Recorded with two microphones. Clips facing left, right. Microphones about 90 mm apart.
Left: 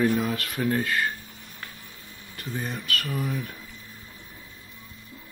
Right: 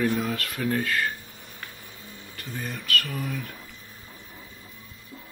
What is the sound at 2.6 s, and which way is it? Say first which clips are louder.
Speech: right 3 dB; 20° left (ahead or behind).